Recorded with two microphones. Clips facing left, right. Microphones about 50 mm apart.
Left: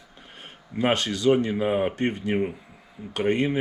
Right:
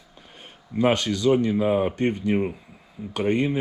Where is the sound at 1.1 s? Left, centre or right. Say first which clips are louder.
Right 1 dB; left.